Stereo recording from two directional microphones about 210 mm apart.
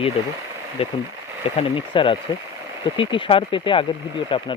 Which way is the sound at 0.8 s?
25° left (ahead or behind).